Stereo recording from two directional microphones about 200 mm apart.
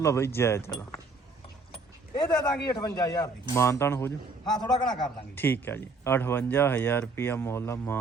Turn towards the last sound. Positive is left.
turn(degrees=10)  # may be behind; listen again after turning